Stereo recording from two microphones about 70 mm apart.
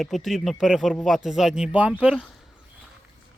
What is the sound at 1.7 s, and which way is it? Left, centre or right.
Speech, right.